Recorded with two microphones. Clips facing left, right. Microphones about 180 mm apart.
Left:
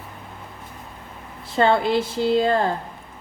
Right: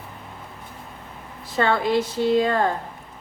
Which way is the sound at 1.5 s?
25° left (ahead or behind).